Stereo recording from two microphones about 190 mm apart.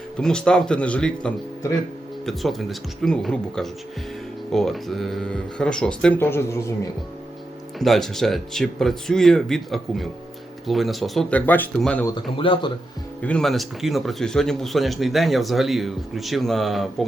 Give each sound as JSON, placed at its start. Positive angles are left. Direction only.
{"t": 0.2, "sound": "speech", "side_deg": 5}
{"t": 7.8, "sound": "speech", "side_deg": 0}
{"t": 12.0, "sound": "speech", "side_deg": 25}
{"t": 13.2, "sound": "speech", "side_deg": 5}